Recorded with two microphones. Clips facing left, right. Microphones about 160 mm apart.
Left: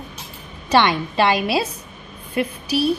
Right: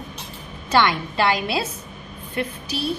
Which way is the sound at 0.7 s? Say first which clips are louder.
Left 2 dB; 20° left (ahead or behind).